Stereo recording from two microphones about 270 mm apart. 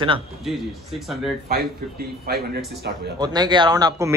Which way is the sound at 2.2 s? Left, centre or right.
Right.